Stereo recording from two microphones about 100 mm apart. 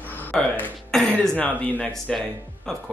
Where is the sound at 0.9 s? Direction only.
5° left (ahead or behind).